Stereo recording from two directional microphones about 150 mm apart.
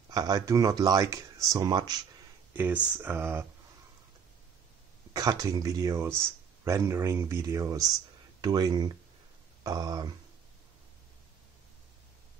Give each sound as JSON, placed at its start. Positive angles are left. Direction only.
{"t": 0.1, "sound": "speech", "side_deg": -25}
{"t": 2.5, "sound": "speech", "side_deg": -15}
{"t": 5.1, "sound": "speech", "side_deg": -25}